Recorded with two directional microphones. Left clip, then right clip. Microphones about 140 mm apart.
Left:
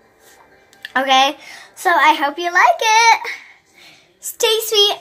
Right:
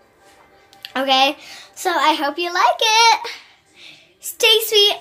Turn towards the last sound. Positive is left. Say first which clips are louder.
# right 1 dB
turn(degrees=0)  # may be behind; listen again after turning